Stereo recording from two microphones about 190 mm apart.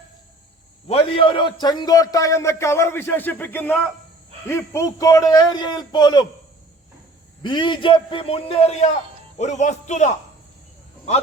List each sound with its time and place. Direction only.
0.9 s a man's voice: 30° left (ahead or behind)
7.4 s a man's voice: 25° left (ahead or behind)